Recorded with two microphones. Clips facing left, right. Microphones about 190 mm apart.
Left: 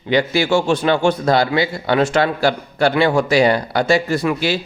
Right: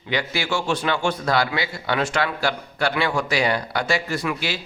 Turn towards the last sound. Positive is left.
turn(degrees=30)  # may be behind; listen again after turning